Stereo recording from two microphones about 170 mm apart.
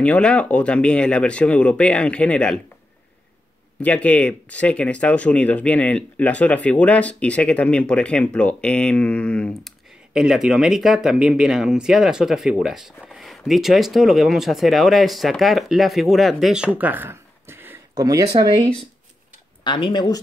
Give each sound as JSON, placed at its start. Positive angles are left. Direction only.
{"t": 0.0, "sound": "speech", "side_deg": 5}
{"t": 3.8, "sound": "speech", "side_deg": 5}
{"t": 19.6, "sound": "speech", "side_deg": 25}